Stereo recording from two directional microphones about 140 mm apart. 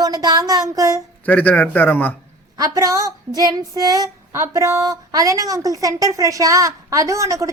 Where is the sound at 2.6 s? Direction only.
25° right (ahead or behind).